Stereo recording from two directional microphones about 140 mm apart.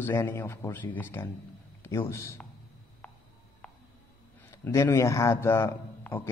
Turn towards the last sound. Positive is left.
turn(degrees=15)  # may be behind; listen again after turning